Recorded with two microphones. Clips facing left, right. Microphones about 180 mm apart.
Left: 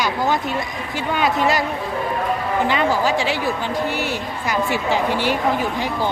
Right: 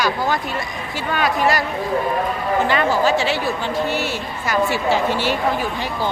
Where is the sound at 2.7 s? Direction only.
15° left (ahead or behind).